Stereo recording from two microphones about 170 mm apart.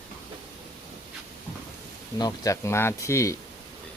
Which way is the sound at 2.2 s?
20° left (ahead or behind).